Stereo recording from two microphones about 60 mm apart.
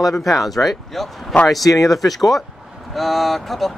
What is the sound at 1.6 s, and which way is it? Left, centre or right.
Speech, left.